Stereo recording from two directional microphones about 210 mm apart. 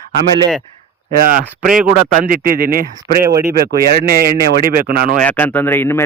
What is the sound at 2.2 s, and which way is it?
Speech, 45° right (ahead or behind).